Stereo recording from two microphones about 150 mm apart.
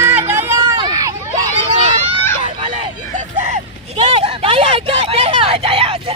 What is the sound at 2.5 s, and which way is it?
Hubbub, 35° right (ahead or behind).